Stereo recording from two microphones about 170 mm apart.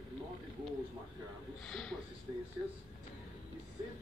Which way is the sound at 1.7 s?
5° left (ahead or behind).